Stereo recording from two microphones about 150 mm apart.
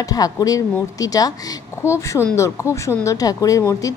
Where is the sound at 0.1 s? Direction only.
25° left (ahead or behind).